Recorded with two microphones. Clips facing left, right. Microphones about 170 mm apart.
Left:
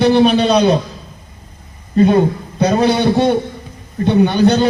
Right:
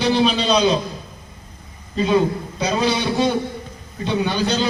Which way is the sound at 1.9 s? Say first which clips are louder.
Left 6 dB; 55° left (ahead or behind).